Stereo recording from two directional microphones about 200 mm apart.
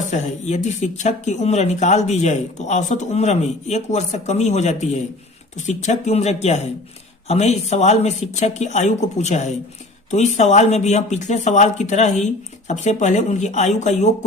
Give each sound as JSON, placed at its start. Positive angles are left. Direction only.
{"t": 0.0, "sound": "speech", "side_deg": 35}